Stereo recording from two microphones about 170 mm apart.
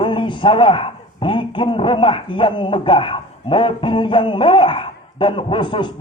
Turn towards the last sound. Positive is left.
turn(degrees=30)  # may be behind; listen again after turning